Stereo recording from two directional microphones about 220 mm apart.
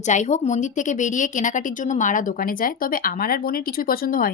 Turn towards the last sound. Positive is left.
turn(degrees=40)  # may be behind; listen again after turning